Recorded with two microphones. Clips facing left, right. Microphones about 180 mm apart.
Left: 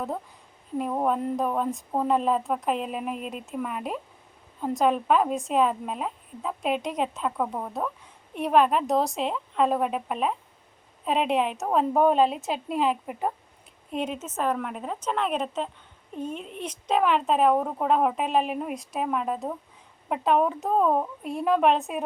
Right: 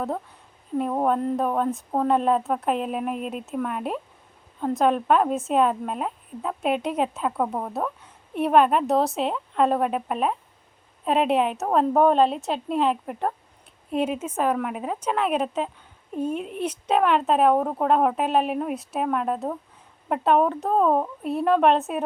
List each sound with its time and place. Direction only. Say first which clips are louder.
1.0 s a woman's voice: right 2 dB; centre (ahead or behind)